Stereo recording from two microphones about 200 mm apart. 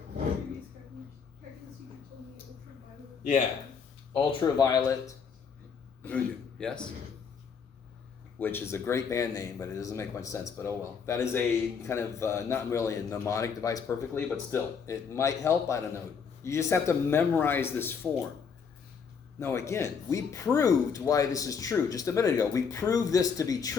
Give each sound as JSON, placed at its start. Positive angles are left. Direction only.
{"t": 4.1, "sound": "a man's voice", "side_deg": 25}
{"t": 8.4, "sound": "speech", "side_deg": 10}
{"t": 19.4, "sound": "speech", "side_deg": 15}